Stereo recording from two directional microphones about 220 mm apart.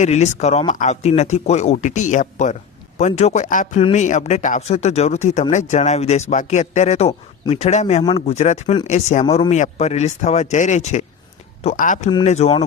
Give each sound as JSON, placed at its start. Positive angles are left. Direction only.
{"t": 0.0, "sound": "speech", "side_deg": 30}